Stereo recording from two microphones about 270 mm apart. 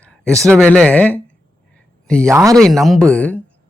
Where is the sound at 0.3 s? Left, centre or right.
Centre.